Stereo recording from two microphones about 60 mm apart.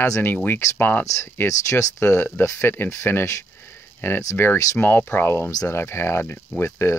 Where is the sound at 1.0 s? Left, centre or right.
Left.